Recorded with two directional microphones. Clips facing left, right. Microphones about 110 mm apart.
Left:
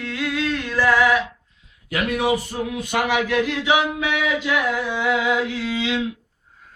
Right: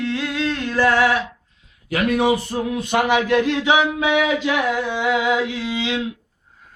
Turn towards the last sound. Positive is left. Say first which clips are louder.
# even
turn(degrees=-20)  # may be behind; listen again after turning